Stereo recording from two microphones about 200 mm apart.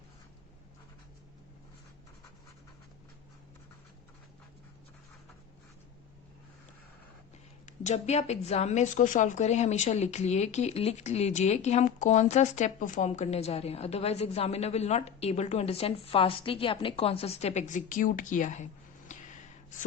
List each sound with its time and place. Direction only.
7.6 s a woman's voice: 35° left (ahead or behind)